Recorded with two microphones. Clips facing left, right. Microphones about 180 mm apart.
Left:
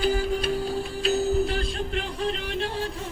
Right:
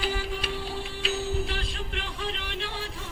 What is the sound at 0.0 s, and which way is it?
Music, 45° left (ahead or behind).